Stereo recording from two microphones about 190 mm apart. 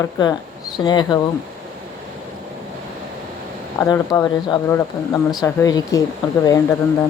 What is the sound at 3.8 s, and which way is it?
Speech, 15° left (ahead or behind).